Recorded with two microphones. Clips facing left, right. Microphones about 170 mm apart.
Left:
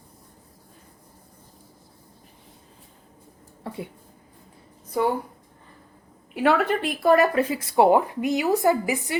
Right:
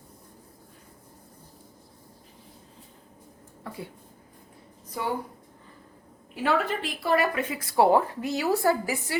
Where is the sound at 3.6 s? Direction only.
25° left (ahead or behind).